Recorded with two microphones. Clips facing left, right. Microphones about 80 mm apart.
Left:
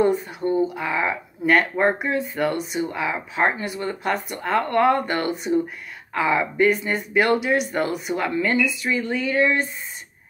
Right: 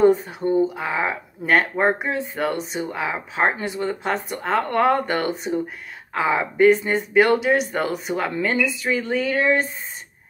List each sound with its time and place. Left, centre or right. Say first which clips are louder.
0.0 s speech: right 3 dB; right